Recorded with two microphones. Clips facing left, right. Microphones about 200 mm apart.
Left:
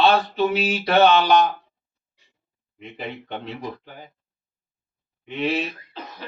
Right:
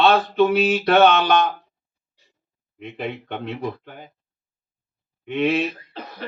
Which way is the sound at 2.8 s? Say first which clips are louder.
Right 4 dB; 55° right (ahead or behind).